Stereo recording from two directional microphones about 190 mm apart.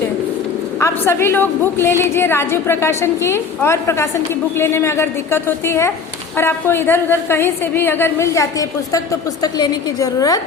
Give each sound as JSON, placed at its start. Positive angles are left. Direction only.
{"t": 0.8, "sound": "a woman's voice", "side_deg": 15}